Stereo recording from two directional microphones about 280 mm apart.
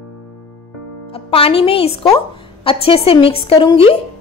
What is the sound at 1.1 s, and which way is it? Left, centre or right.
A woman's voice, centre.